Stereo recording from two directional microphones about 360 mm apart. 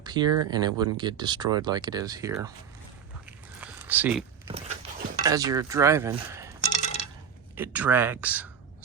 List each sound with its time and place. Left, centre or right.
0.0 s speech: centre
3.2 s biting: centre
5.2 s speech: centre
6.6 s a sound: centre
7.5 s speech: centre